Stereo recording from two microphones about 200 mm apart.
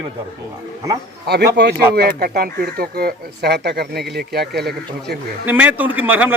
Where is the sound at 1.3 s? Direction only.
55° right (ahead or behind).